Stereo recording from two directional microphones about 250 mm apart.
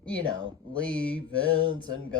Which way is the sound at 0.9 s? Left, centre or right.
Centre.